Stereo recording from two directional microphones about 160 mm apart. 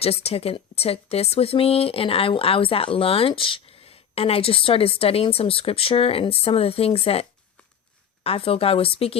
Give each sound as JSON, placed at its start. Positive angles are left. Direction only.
{"t": 0.0, "sound": "speech", "side_deg": 40}